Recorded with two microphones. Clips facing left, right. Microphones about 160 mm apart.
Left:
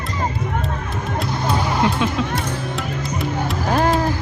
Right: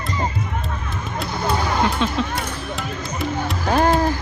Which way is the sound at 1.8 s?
20° left (ahead or behind).